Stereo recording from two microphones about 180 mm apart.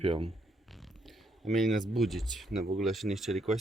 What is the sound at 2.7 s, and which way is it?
Speech, centre (ahead or behind).